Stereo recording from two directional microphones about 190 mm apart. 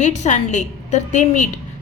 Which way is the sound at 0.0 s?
40° left (ahead or behind).